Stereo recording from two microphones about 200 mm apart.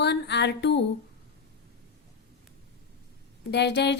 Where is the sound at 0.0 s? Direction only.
60° left (ahead or behind).